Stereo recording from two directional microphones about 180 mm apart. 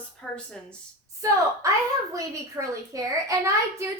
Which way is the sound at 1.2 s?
20° right (ahead or behind).